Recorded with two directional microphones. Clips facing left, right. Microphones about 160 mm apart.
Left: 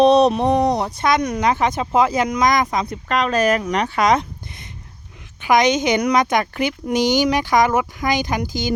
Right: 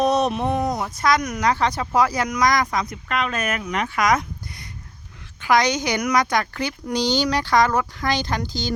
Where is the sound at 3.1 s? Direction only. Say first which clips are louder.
Left 8 dB; 35° left (ahead or behind).